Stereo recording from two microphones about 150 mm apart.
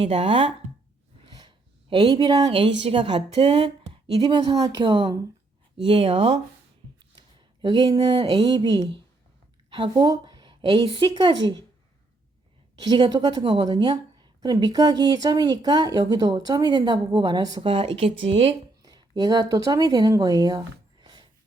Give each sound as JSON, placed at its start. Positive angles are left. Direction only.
{"t": 0.0, "sound": "a woman's voice", "side_deg": -40}
{"t": 12.8, "sound": "a woman's voice", "side_deg": -30}
{"t": 18.8, "sound": "speech", "side_deg": -25}